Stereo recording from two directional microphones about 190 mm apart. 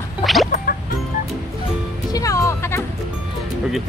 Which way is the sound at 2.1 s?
20° left (ahead or behind).